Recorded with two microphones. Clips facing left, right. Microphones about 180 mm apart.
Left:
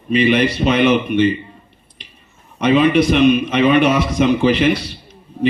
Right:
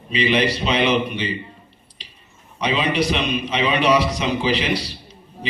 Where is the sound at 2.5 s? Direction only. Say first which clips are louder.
Left 8 dB; 55° left (ahead or behind).